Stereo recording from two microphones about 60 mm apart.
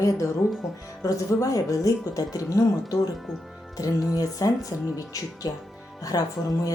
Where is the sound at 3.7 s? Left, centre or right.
Left.